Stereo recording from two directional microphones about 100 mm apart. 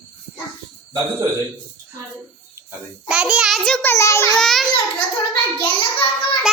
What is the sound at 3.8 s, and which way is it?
Speech, 30° left (ahead or behind).